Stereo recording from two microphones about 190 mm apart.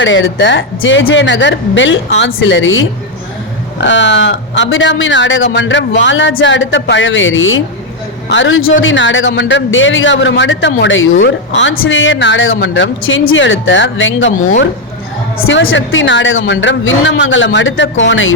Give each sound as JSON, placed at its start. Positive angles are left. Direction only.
{"t": 0.0, "sound": "speech", "side_deg": 75}
{"t": 3.8, "sound": "a man's voice", "side_deg": 70}
{"t": 15.4, "sound": "speech", "side_deg": 85}